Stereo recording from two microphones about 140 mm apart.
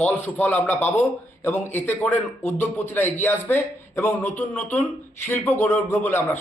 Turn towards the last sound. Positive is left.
turn(degrees=15)  # may be behind; listen again after turning